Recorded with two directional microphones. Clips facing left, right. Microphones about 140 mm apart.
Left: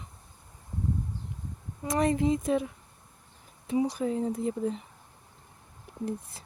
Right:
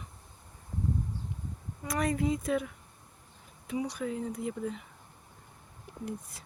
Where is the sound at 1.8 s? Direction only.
25° left (ahead or behind).